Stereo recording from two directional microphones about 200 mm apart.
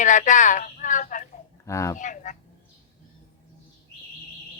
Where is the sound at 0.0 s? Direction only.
40° left (ahead or behind).